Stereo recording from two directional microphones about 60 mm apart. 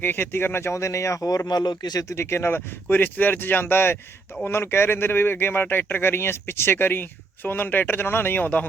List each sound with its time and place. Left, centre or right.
0.0 s speech: left
1.5 s speech: left
2.1 s speech: left